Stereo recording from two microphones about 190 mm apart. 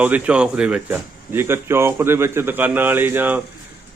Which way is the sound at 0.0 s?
5° right (ahead or behind).